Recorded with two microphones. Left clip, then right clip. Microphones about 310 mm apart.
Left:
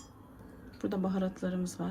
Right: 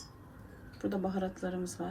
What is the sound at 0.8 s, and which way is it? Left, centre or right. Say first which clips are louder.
Speech: even; left.